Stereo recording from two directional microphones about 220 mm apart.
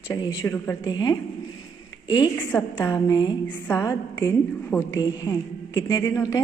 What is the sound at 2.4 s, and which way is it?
A woman's voice, 5° left (ahead or behind).